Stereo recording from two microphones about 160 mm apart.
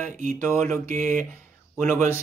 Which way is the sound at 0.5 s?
55° right (ahead or behind).